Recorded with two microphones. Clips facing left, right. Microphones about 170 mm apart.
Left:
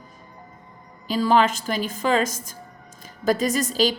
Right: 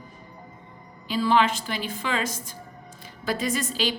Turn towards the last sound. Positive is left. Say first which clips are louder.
# left 5 dB
turn(degrees=40)  # may be behind; listen again after turning